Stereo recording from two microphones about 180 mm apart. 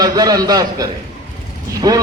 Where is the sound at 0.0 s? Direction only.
20° right (ahead or behind).